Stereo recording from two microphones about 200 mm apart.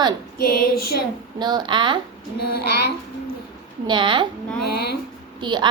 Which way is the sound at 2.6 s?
55° left (ahead or behind).